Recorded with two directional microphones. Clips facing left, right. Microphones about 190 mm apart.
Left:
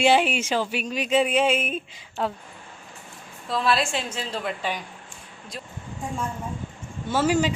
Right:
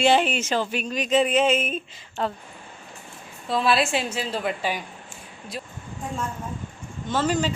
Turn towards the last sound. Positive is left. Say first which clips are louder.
# left 2 dB
turn(degrees=10)  # may be behind; listen again after turning